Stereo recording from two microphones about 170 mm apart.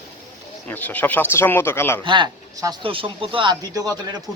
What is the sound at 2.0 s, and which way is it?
Speech, 30° right (ahead or behind).